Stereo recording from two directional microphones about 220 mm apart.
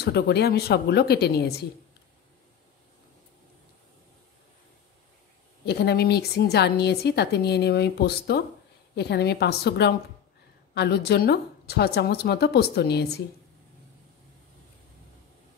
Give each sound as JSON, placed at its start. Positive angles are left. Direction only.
{"t": 0.0, "sound": "a woman's voice", "side_deg": 45}
{"t": 5.7, "sound": "a woman's voice", "side_deg": 45}